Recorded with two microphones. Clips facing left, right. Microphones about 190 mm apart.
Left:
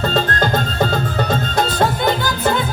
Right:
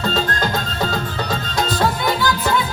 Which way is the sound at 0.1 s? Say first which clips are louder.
Left 3 dB; 50° left (ahead or behind).